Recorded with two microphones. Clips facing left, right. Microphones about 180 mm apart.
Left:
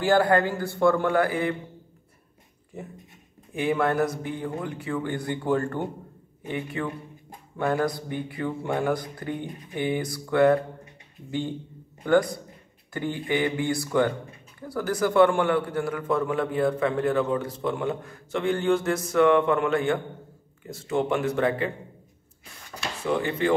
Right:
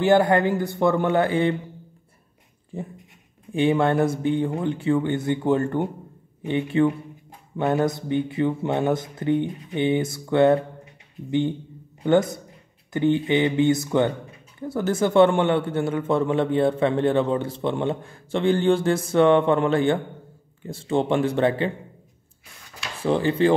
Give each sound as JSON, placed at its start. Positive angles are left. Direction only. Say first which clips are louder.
{"t": 0.0, "sound": "a man's voice", "louder": "right 3 dB", "side_deg": -20}
{"t": 2.7, "sound": "a man's voice", "louder": "right 5 dB", "side_deg": -30}
{"t": 23.0, "sound": "speech", "louder": "right 5 dB", "side_deg": -30}